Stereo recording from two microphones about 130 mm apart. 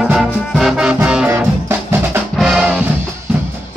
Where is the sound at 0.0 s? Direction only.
5° right (ahead or behind).